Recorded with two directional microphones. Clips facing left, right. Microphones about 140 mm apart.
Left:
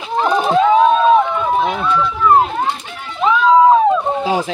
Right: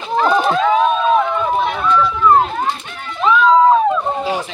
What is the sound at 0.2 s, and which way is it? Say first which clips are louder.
Run: even; 15° left (ahead or behind).